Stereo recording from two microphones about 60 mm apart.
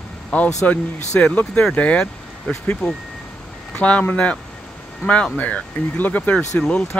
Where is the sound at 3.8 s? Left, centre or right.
Left.